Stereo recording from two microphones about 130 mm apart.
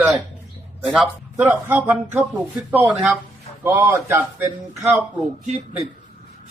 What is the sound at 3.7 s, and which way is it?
Speech, 20° right (ahead or behind).